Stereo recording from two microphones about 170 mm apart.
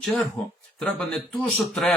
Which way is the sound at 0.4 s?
5° left (ahead or behind).